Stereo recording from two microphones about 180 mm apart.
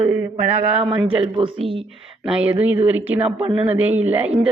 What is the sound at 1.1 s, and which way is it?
Speech, 30° right (ahead or behind).